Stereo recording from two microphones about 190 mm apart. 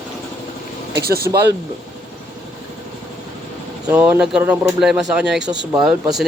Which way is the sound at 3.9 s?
10° right (ahead or behind).